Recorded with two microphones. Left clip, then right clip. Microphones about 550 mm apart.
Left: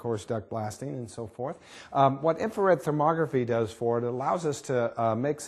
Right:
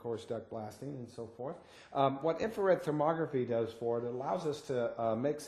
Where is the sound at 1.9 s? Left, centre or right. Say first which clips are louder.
Left 8 dB; left.